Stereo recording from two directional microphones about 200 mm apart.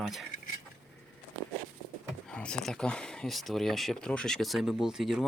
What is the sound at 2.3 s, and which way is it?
Speech, 5° left (ahead or behind).